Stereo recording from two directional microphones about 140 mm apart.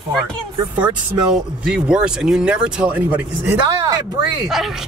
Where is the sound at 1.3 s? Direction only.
5° right (ahead or behind).